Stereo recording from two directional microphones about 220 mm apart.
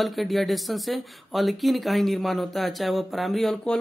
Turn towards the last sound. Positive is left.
turn(degrees=0)  # may be behind; listen again after turning